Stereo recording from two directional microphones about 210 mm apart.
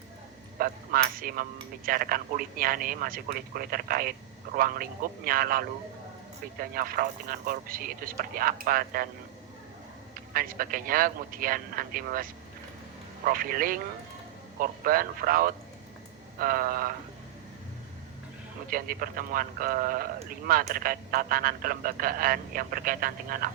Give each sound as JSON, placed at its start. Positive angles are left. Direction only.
{"t": 0.6, "sound": "speech", "side_deg": -45}
{"t": 10.3, "sound": "speech", "side_deg": -40}
{"t": 18.7, "sound": "speech", "side_deg": -40}